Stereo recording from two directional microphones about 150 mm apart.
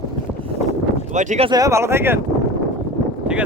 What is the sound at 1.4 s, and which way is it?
Speech, 25° right (ahead or behind).